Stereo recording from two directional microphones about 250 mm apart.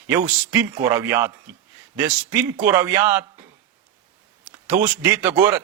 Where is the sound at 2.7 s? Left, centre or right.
Centre.